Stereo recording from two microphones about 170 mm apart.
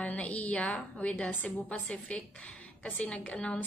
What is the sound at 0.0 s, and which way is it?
A woman's voice, 10° left (ahead or behind).